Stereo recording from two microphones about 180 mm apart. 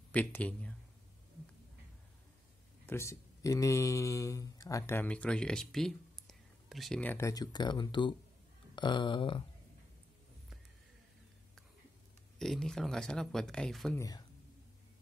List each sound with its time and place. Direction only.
0.1 s speech: 10° left (ahead or behind)
2.9 s speech: 15° left (ahead or behind)
12.4 s speech: 5° left (ahead or behind)
13.9 s speech: 20° left (ahead or behind)